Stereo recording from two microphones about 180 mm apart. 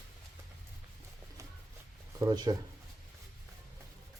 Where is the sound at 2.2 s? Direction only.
20° right (ahead or behind).